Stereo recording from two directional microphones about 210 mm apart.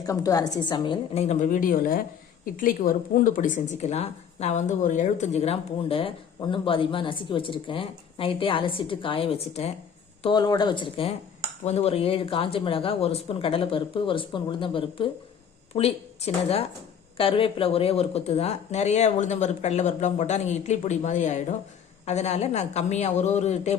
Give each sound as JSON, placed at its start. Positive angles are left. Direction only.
{"t": 0.0, "sound": "a woman's voice", "side_deg": 15}
{"t": 10.2, "sound": "a woman's voice", "side_deg": 20}